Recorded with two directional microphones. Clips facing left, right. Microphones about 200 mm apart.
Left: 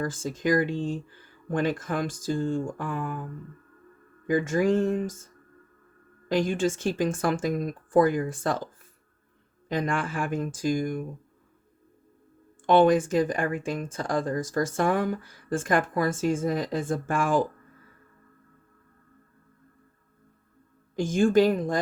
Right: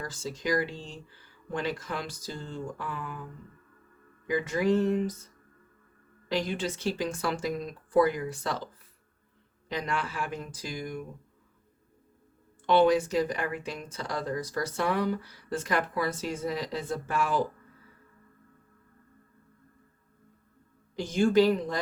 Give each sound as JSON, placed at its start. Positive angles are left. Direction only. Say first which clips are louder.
{"t": 0.0, "sound": "speech", "louder": "left 6 dB", "side_deg": 50}
{"t": 4.3, "sound": "speech", "louder": "left 3 dB", "side_deg": 45}
{"t": 12.6, "sound": "speech", "louder": "left 3 dB", "side_deg": 50}
{"t": 20.9, "sound": "speech", "louder": "left 2 dB", "side_deg": 50}